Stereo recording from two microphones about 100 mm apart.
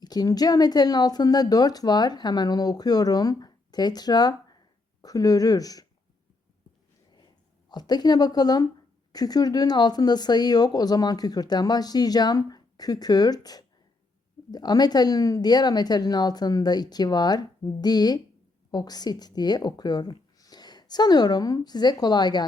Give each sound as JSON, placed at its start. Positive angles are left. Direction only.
{"t": 0.0, "sound": "speech", "side_deg": 40}
{"t": 7.7, "sound": "a woman's voice", "side_deg": 45}